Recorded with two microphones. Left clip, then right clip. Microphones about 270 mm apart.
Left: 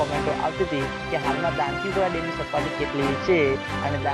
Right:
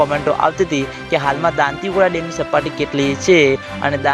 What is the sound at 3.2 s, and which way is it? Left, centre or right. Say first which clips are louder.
Speech: right 10 dB; right.